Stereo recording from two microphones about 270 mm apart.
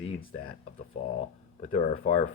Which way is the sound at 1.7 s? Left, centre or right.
Left.